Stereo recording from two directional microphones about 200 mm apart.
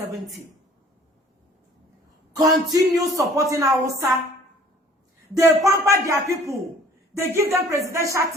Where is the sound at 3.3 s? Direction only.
15° right (ahead or behind).